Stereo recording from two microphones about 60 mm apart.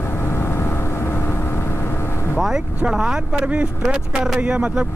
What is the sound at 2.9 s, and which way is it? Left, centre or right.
Speech, centre.